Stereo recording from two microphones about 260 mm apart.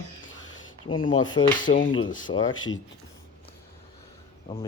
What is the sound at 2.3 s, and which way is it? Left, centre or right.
Speech, left.